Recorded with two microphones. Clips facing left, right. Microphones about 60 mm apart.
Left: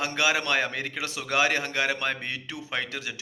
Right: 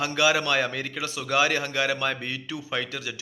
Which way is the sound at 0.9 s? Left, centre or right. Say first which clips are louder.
Right 2 dB; left.